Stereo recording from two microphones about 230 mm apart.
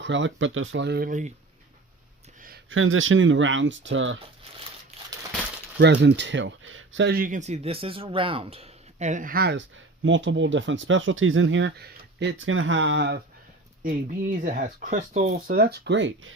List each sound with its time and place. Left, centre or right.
0.0 s speech: right
2.6 s speech: right
5.8 s speech: right
13.8 s speech: right